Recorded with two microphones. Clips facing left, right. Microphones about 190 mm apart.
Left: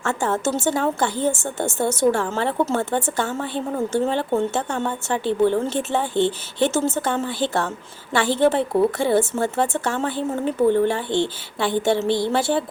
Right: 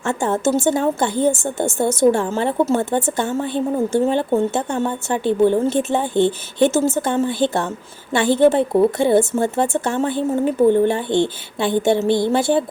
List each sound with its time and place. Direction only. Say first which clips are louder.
0.0 s speech: right 3 dB; 15° right (ahead or behind)